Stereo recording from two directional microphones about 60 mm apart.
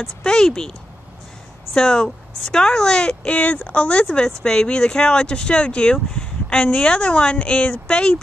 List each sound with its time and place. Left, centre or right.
0.2 s speech: centre
3.3 s speech: left